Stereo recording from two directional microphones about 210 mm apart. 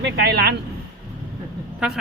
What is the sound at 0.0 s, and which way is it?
Speech, 50° right (ahead or behind).